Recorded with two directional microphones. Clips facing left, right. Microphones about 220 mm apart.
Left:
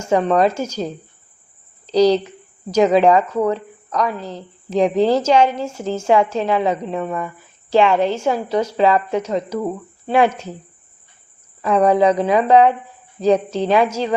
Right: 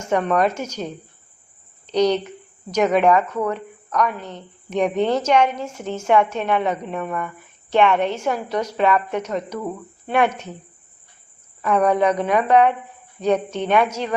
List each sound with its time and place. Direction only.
0.0 s speech: 30° left (ahead or behind)
1.9 s speech: 30° left (ahead or behind)
11.6 s speech: 30° left (ahead or behind)